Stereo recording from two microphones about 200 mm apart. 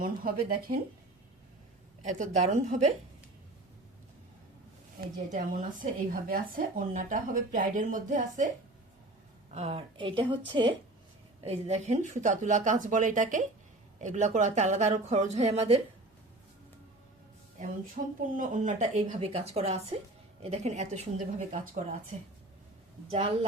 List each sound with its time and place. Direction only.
0.0 s speech: 45° right (ahead or behind)
2.0 s speech: 35° right (ahead or behind)
5.0 s speech: 45° right (ahead or behind)
9.5 s a woman's voice: 30° right (ahead or behind)
18.0 s speech: 40° right (ahead or behind)